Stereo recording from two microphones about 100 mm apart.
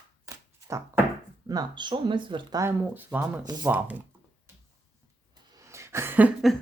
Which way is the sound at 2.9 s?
20° right (ahead or behind).